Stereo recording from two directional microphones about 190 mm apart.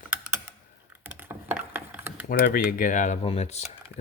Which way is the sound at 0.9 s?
10° right (ahead or behind).